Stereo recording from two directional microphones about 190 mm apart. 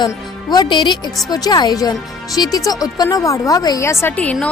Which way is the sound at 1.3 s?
20° left (ahead or behind).